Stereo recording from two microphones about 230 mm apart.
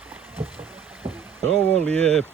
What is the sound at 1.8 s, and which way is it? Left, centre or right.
Speech, centre.